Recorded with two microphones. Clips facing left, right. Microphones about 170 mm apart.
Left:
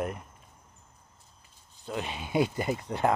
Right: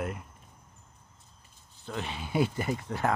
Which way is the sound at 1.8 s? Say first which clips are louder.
Left 2 dB; 15° left (ahead or behind).